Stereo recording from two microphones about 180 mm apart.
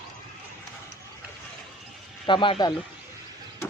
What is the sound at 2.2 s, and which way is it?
Speech, 30° left (ahead or behind).